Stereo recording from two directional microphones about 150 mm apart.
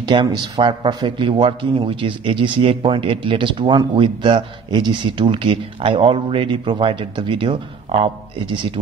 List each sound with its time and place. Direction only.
0.0 s speech: 30° right (ahead or behind)